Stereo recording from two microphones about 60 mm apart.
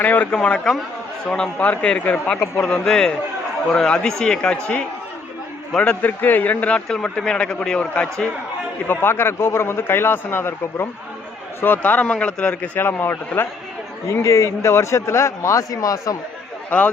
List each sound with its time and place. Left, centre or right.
0.0 s speech: left
0.4 s speech: centre
1.7 s speech: centre
2.6 s speech: centre
5.7 s speech: centre
6.0 s speech: left
6.8 s speech: centre
8.9 s a man's voice: left
11.8 s speech: left
12.8 s a man's voice: left
14.1 s speech: left
16.6 s a man's voice: left